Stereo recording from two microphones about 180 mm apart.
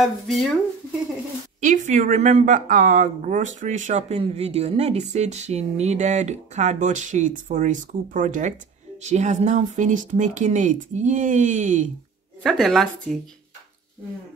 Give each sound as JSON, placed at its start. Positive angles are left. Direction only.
{"t": 0.0, "sound": "speech", "side_deg": 0}
{"t": 1.6, "sound": "speech", "side_deg": -45}
{"t": 12.4, "sound": "speech", "side_deg": 0}